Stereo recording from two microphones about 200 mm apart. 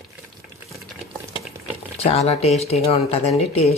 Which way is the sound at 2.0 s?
30° left (ahead or behind).